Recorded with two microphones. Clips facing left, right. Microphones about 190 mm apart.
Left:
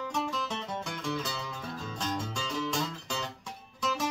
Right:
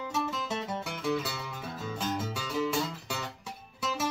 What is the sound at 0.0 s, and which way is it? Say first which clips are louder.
Music: even; 5° right (ahead or behind).